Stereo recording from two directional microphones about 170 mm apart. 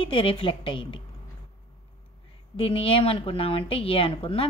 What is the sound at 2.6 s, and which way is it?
A woman's voice, 35° left (ahead or behind).